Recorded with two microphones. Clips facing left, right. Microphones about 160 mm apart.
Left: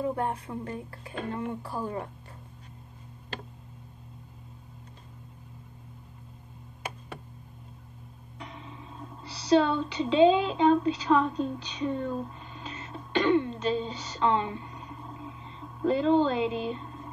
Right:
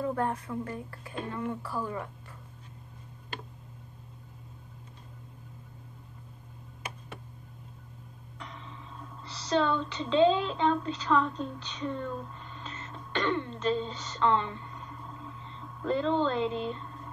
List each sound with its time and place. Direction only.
0.0 s speech: 20° left (ahead or behind)
8.4 s music: 10° left (ahead or behind)
9.3 s speech: 10° left (ahead or behind)